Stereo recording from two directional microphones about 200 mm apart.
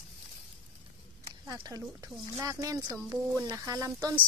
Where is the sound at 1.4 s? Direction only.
20° right (ahead or behind).